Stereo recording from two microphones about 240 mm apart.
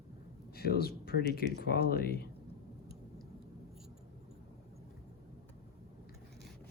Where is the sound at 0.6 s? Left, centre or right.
Left.